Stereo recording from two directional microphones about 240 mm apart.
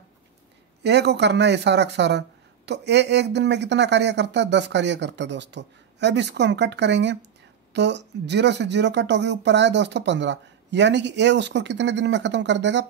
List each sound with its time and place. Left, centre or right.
0.8 s speech: right